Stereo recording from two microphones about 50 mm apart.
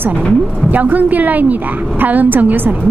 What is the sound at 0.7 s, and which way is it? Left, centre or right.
A woman's voice, right.